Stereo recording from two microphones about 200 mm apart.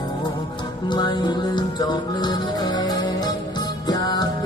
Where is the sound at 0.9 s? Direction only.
20° left (ahead or behind).